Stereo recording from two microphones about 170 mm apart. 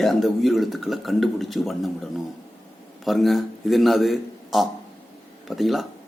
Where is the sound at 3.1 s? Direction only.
Centre (ahead or behind).